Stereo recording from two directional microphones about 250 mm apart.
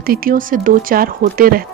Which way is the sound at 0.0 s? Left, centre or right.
Right.